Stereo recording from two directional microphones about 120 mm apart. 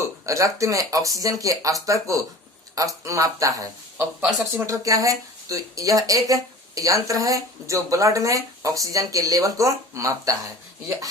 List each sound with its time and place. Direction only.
0.3 s speech: 25° right (ahead or behind)
4.2 s speech: 5° right (ahead or behind)
4.6 s speech: 30° right (ahead or behind)